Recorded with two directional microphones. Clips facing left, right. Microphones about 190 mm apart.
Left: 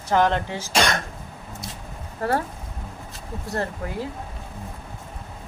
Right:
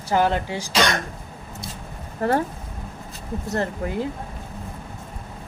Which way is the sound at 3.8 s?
25° right (ahead or behind).